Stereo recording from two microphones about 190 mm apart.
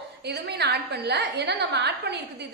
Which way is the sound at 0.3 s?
65° right (ahead or behind).